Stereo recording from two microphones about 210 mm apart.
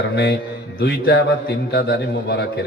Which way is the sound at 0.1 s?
50° left (ahead or behind).